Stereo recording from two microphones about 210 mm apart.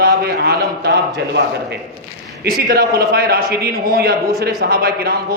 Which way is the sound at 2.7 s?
50° right (ahead or behind).